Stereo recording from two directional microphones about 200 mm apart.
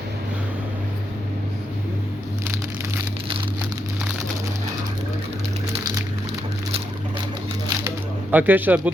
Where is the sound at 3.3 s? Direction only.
25° right (ahead or behind).